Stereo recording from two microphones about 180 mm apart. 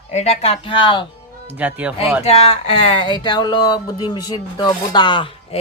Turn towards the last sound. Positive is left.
turn(degrees=30)  # may be behind; listen again after turning